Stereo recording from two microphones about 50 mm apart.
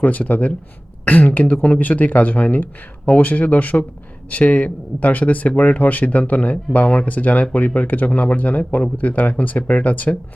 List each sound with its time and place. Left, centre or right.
0.0 s speech: left